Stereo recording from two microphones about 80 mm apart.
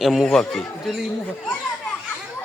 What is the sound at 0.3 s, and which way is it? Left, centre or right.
Speech, centre.